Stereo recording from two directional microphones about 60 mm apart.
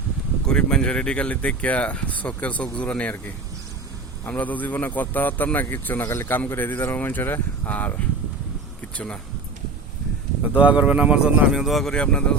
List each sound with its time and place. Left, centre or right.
0.4 s speech: centre
4.3 s speech: left
7.7 s speech: left
10.5 s speech: right
11.6 s speech: centre
11.9 s speech: centre